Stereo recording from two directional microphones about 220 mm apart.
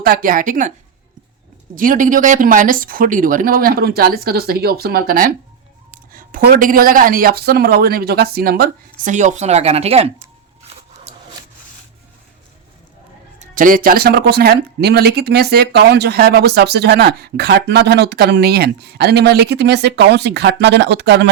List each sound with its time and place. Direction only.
0.0 s speech: 40° right (ahead or behind)
1.7 s speech: 40° right (ahead or behind)
11.1 s a sound: 30° right (ahead or behind)
13.4 s speech: 40° right (ahead or behind)